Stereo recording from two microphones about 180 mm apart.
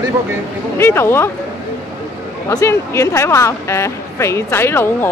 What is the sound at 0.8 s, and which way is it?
Speech, 15° left (ahead or behind).